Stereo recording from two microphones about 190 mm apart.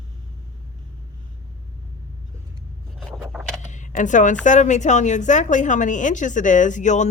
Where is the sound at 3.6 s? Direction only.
40° left (ahead or behind).